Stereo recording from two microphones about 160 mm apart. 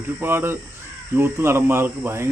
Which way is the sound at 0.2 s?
15° right (ahead or behind).